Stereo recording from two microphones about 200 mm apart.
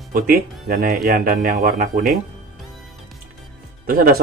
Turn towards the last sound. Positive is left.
turn(degrees=-50)  # may be behind; listen again after turning